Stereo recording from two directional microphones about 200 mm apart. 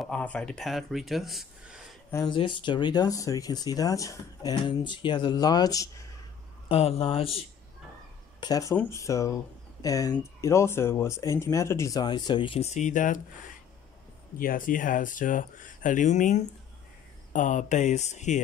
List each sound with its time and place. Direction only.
0.0 s speech: 5° left (ahead or behind)
2.0 s speech: 20° left (ahead or behind)
6.7 s speech: 30° left (ahead or behind)
8.4 s speech: 20° left (ahead or behind); by 13.2 s 40° left (ahead or behind)
14.4 s speech: 45° left (ahead or behind)